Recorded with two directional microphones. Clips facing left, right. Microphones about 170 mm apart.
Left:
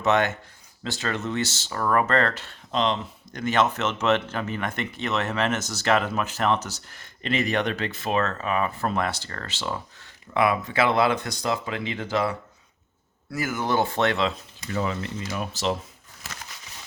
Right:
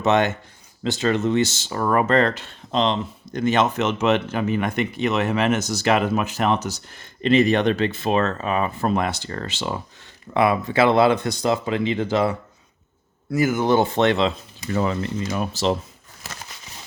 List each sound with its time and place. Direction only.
0.0 s speech: 20° right (ahead or behind)
10.3 s speech: 30° right (ahead or behind)
14.7 s speech: 35° right (ahead or behind)